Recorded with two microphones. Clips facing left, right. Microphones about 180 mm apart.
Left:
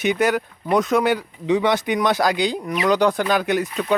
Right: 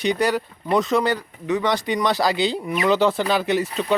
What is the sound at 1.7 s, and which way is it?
Speech, centre (ahead or behind).